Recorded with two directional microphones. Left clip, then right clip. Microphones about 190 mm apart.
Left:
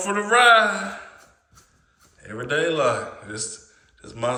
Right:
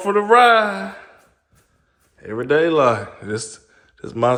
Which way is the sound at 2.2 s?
40° right (ahead or behind).